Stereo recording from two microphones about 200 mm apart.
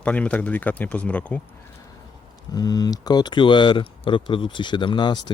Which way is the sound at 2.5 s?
20° left (ahead or behind).